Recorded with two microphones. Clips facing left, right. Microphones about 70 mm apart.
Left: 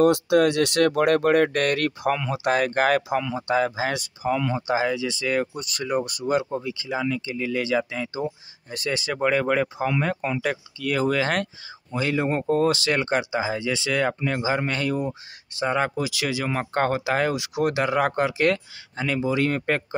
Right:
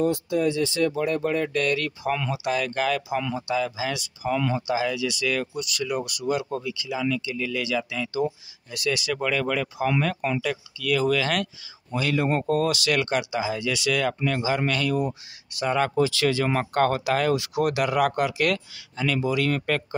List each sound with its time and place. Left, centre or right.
0.0 s speech: left